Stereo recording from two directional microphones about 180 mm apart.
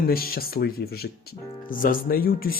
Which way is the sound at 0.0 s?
55° left (ahead or behind).